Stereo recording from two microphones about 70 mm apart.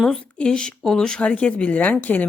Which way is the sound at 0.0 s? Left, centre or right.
Centre.